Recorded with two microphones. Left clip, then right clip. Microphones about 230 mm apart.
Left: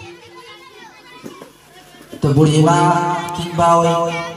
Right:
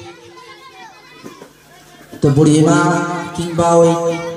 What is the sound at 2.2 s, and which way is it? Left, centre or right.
Music, left.